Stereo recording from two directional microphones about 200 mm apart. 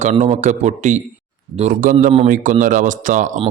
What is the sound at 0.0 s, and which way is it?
A man's voice, 35° right (ahead or behind).